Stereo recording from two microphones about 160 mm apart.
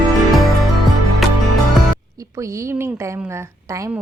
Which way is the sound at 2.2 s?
20° right (ahead or behind).